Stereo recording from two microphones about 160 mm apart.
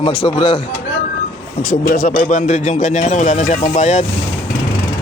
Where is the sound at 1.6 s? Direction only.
60° left (ahead or behind).